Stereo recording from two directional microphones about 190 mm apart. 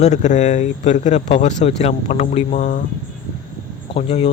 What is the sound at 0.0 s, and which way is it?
Speech, 40° left (ahead or behind).